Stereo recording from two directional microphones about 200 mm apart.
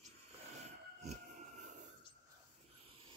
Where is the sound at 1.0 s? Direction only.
35° right (ahead or behind).